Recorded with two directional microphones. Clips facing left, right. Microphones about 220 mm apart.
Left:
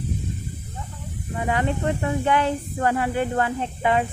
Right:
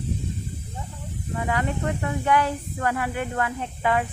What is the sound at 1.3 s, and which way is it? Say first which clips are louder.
Speech: left 2 dB; 25° left (ahead or behind).